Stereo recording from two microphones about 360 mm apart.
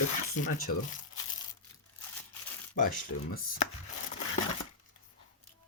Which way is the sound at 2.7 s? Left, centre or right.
Left.